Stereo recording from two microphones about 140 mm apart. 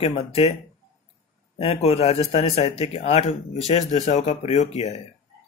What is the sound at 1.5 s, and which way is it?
Speech, 45° left (ahead or behind).